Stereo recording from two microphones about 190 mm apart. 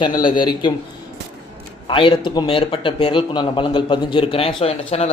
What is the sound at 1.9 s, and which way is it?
Speech, 25° left (ahead or behind).